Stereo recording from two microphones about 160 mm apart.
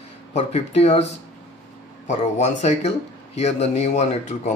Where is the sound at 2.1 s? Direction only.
45° left (ahead or behind).